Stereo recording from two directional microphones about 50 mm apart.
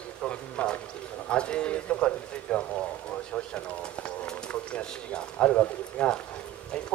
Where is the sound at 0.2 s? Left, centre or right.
Left.